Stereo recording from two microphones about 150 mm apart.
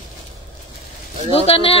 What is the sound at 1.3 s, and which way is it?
Speech, 40° left (ahead or behind).